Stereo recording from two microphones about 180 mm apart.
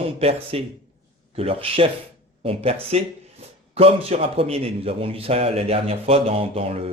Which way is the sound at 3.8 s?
35° right (ahead or behind).